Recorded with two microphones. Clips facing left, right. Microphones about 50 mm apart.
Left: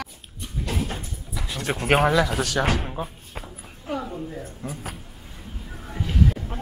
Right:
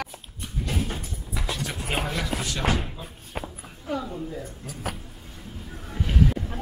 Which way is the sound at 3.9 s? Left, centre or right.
Left.